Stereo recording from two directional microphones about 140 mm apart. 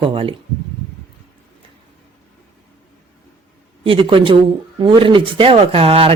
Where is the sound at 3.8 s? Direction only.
40° right (ahead or behind).